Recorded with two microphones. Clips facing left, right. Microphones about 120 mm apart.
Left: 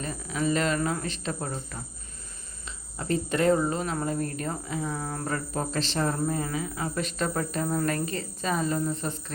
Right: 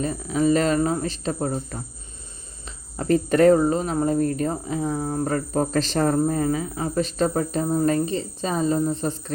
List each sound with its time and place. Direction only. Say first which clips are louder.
0.0 s speech: right 8 dB; 35° right (ahead or behind)